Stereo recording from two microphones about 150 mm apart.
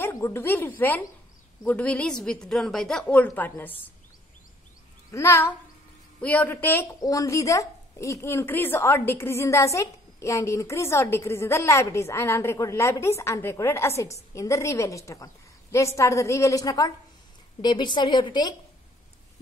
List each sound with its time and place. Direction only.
0.0 s a woman's voice: 20° left (ahead or behind)
5.1 s a woman's voice: 15° left (ahead or behind)